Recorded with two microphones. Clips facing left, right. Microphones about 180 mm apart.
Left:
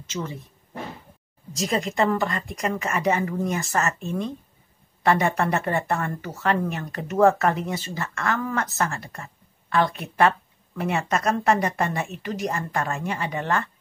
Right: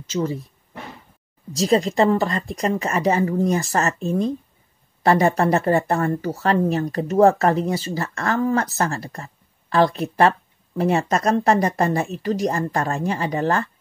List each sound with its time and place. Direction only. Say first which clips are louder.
0.0 s speech: right 8 dB; 35° right (ahead or behind)
1.5 s speech: right 7 dB; 30° right (ahead or behind)